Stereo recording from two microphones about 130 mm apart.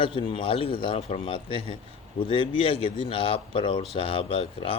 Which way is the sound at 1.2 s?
40° left (ahead or behind).